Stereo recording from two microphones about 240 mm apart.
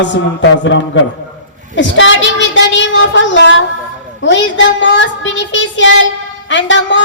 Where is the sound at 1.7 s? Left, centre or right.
Left.